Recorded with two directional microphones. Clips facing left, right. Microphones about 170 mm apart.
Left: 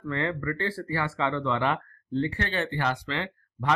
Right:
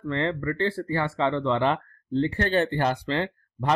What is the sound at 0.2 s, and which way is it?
Speech, 25° right (ahead or behind).